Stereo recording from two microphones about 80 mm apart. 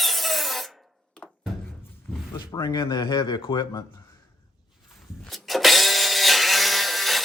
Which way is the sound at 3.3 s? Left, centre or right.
Left.